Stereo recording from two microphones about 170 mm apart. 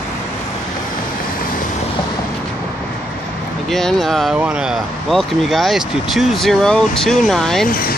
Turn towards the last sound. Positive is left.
turn(degrees=60)  # may be behind; listen again after turning